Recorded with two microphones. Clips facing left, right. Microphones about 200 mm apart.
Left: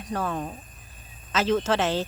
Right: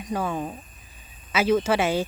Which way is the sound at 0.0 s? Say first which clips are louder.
Right 2 dB; 10° right (ahead or behind).